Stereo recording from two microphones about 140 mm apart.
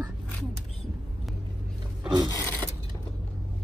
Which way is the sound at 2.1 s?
30° right (ahead or behind).